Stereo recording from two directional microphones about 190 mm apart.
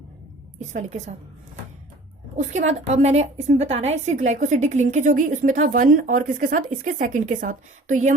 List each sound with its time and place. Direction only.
0.6 s a woman's voice: 40° right (ahead or behind)
2.3 s a woman's voice: 40° right (ahead or behind)